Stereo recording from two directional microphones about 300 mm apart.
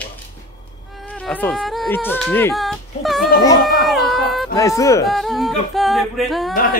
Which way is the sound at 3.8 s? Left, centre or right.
Centre.